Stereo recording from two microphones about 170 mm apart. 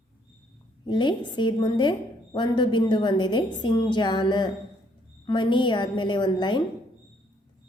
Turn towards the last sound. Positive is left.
turn(degrees=25)  # may be behind; listen again after turning